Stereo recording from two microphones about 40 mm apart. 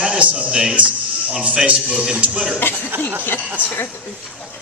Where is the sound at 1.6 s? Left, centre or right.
Right.